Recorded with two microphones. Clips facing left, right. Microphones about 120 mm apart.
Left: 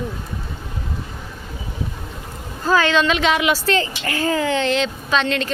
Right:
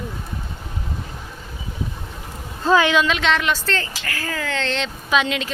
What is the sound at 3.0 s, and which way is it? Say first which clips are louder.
A woman's voice: left 2 dB; centre (ahead or behind).